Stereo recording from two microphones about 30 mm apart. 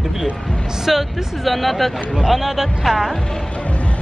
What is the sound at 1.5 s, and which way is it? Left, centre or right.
A man's voice, centre.